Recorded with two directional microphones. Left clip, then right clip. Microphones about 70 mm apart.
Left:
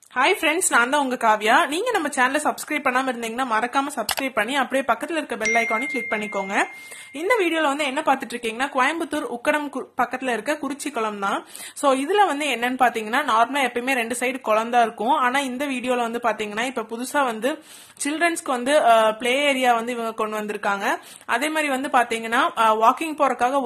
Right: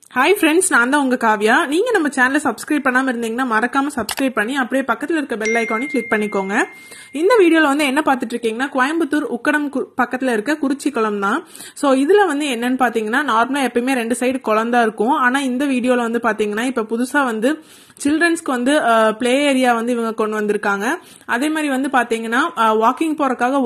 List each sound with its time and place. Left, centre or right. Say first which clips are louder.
0.3 s a woman's voice: right 8 dB; right
0.6 s speech: right 5 dB; right
1.7 s a woman's voice: right 6 dB; right
4.5 s speech: right 2 dB; centre
6.3 s speech: right 4 dB; right
7.2 s a woman's voice: right 8 dB; right
8.5 s a woman's voice: right 3 dB; right
10.2 s a woman's voice: right 6 dB; right
16.3 s a woman's voice: right 5 dB; right
18.0 s speech: right 5 dB; right
18.3 s a woman's voice: right 3 dB; right
18.9 s speech: right 4 dB; right
20.9 s a woman's voice: right 3 dB; right